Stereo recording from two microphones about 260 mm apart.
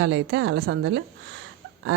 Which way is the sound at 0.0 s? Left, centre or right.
Right.